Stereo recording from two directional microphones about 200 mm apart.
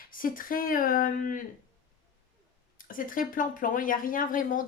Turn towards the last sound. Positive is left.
turn(degrees=40)  # may be behind; listen again after turning